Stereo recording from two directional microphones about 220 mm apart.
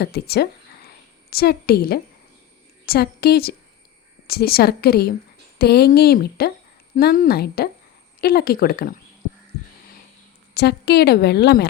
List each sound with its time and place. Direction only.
0.0 s a woman's voice: 45° left (ahead or behind)
10.5 s a woman's voice: 45° left (ahead or behind)